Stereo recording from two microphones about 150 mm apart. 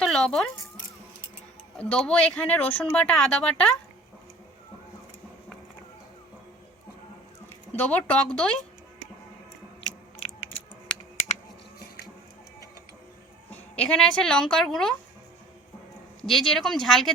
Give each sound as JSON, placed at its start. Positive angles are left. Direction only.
{"t": 0.0, "sound": "speech", "side_deg": 0}
{"t": 1.8, "sound": "speech", "side_deg": 5}
{"t": 7.8, "sound": "speech", "side_deg": 10}
{"t": 11.2, "sound": "a sound", "side_deg": 50}
{"t": 13.5, "sound": "speech", "side_deg": 10}
{"t": 16.3, "sound": "speech", "side_deg": 0}